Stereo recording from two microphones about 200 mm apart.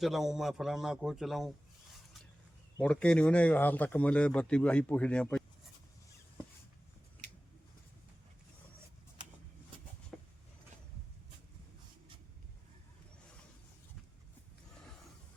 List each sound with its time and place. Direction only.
0.0 s speech: centre (ahead or behind)
2.8 s speech: 5° left (ahead or behind)
10.1 s a sound: 5° left (ahead or behind)